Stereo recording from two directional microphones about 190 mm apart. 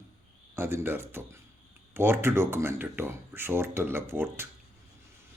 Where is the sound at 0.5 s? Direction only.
10° right (ahead or behind).